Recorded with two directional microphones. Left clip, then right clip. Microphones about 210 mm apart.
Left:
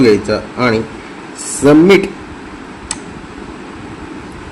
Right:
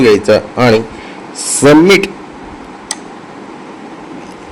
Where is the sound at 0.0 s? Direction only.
50° right (ahead or behind).